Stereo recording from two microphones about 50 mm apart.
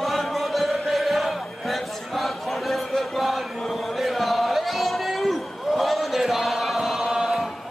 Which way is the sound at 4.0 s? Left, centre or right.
Centre.